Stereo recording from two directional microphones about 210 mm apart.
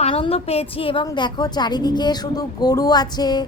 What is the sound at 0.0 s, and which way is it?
A woman's voice, 25° left (ahead or behind).